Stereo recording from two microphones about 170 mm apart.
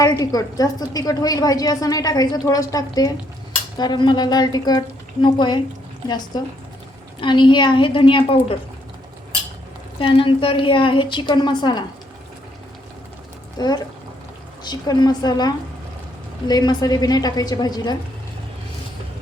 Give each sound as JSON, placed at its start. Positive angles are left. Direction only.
{"t": 0.0, "sound": "a woman's voice", "side_deg": 20}
{"t": 10.0, "sound": "a woman's voice", "side_deg": 30}
{"t": 13.6, "sound": "a woman's voice", "side_deg": 25}